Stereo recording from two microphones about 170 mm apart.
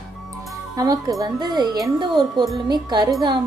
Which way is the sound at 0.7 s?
20° right (ahead or behind).